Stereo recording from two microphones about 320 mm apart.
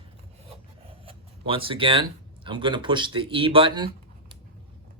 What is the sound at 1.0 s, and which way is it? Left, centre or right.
Speech, centre.